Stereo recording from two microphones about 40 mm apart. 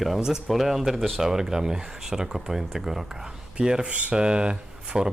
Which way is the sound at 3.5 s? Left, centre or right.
Right.